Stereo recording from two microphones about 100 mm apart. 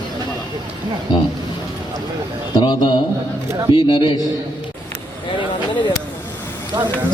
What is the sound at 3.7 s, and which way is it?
Speech, 55° left (ahead or behind).